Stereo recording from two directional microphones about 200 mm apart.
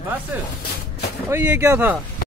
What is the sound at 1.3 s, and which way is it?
Speech, 10° right (ahead or behind).